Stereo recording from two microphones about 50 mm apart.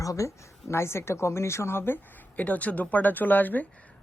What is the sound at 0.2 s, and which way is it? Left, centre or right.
A woman's voice, left.